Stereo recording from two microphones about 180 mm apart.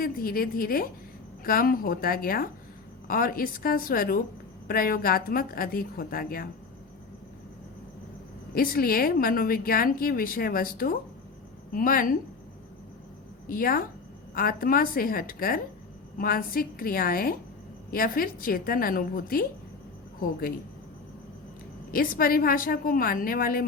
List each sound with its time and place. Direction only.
0.0 s a woman's voice: 55° left (ahead or behind)
8.5 s a woman's voice: 55° left (ahead or behind)
13.5 s a woman's voice: 50° left (ahead or behind)
21.9 s a woman's voice: 50° left (ahead or behind)